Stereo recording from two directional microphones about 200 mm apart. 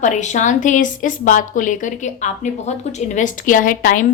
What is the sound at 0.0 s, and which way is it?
A woman's voice, 35° left (ahead or behind).